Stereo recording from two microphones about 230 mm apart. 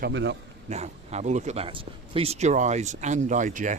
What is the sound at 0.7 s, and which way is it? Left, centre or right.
Speech, right.